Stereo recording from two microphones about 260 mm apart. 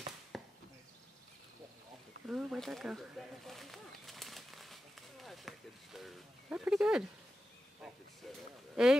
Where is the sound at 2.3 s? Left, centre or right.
Centre.